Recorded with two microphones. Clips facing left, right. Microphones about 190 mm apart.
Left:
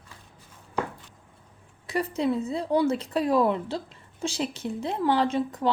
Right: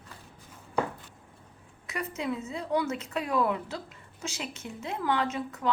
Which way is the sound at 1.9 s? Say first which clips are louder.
Left 7 dB; 35° left (ahead or behind).